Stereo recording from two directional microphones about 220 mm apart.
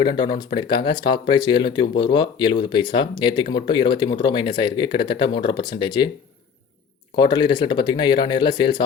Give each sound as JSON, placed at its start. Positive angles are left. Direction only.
{"t": 0.0, "sound": "speech", "side_deg": 20}
{"t": 7.2, "sound": "speech", "side_deg": 20}